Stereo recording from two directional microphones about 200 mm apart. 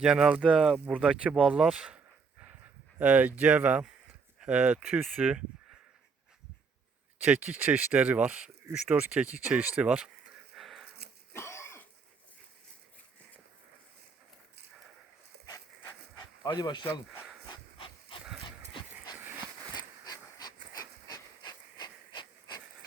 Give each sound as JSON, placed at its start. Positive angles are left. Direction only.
{"t": 0.0, "sound": "speech", "side_deg": -5}
{"t": 3.0, "sound": "speech", "side_deg": -5}
{"t": 7.2, "sound": "speech", "side_deg": -5}
{"t": 11.3, "sound": "cough", "side_deg": 15}
{"t": 16.4, "sound": "speech", "side_deg": 20}
{"t": 17.5, "sound": "pant", "side_deg": 25}
{"t": 19.7, "sound": "pant", "side_deg": 20}